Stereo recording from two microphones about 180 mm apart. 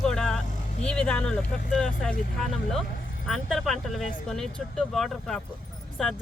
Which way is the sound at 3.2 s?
Centre (ahead or behind).